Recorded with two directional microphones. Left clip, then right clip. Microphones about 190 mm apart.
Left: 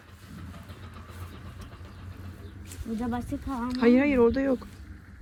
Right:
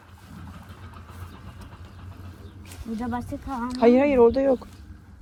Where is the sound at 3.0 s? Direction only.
10° left (ahead or behind).